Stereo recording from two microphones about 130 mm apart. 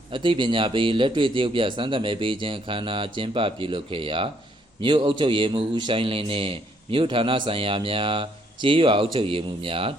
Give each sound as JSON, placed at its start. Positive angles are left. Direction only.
{"t": 0.1, "sound": "a man's voice", "side_deg": -40}